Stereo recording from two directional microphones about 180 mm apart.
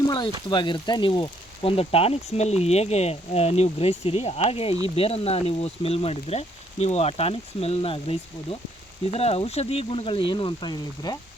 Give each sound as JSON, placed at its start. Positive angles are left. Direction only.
{"t": 0.5, "sound": "speech", "side_deg": 25}